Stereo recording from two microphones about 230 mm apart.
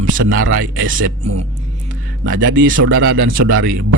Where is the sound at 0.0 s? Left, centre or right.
Right.